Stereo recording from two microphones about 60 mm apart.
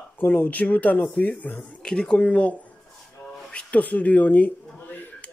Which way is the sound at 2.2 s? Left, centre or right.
Left.